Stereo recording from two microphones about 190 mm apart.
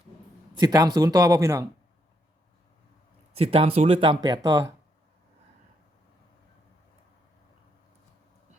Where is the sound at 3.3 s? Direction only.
30° right (ahead or behind).